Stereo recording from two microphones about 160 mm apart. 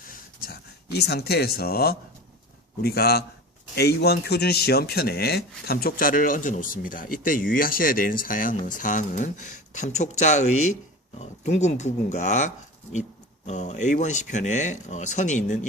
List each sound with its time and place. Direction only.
0.1 s a sound: 80° left
2.8 s a man's voice: 75° left (ahead or behind)
3.8 s speech: 90° left; by 15.6 s 50° left (ahead or behind)